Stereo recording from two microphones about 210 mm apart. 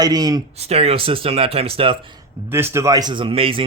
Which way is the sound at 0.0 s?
20° right (ahead or behind).